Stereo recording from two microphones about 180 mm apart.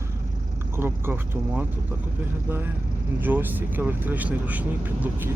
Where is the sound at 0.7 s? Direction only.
15° right (ahead or behind).